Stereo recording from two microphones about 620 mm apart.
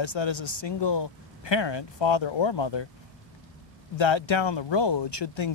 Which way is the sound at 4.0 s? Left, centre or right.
Left.